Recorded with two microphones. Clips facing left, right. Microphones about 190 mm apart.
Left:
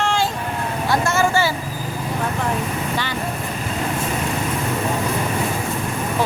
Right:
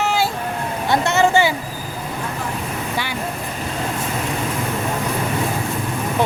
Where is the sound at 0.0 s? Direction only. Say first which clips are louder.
Right 1 dB; 5° right (ahead or behind).